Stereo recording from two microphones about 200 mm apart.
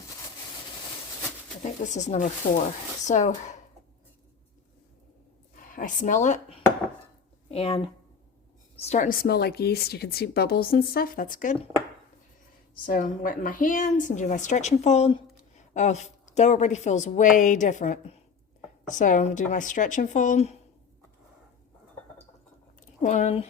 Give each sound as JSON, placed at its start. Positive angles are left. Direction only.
{"t": 1.6, "sound": "a woman's voice", "side_deg": 35}
{"t": 5.5, "sound": "speech", "side_deg": 40}
{"t": 8.9, "sound": "speech", "side_deg": 40}
{"t": 12.7, "sound": "a woman's voice", "side_deg": 45}
{"t": 23.0, "sound": "a woman's voice", "side_deg": 35}